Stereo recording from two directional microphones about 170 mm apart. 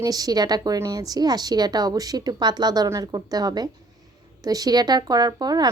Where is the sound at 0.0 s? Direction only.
20° right (ahead or behind).